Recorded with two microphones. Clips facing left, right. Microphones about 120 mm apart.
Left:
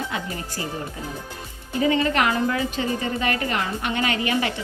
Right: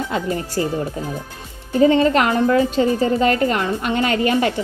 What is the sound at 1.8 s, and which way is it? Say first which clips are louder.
A woman's voice: right 6 dB; 30° right (ahead or behind).